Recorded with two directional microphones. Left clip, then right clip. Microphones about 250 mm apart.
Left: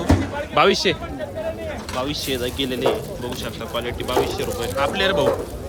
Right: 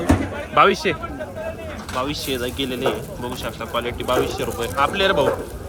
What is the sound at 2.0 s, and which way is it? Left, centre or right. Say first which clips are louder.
Speech: right 1 dB; centre.